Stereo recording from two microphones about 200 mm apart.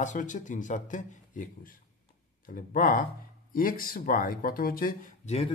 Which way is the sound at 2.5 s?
45° left (ahead or behind).